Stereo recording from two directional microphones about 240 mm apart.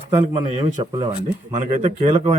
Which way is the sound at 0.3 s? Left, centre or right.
Centre.